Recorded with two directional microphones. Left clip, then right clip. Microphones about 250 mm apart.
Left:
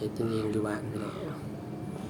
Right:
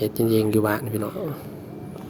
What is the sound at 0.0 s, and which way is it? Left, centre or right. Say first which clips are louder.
Speech: right 10 dB; right.